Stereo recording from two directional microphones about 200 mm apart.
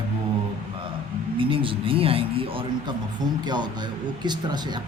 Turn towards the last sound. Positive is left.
turn(degrees=-20)  # may be behind; listen again after turning